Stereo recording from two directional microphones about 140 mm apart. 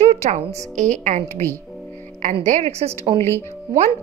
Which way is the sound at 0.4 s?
25° right (ahead or behind).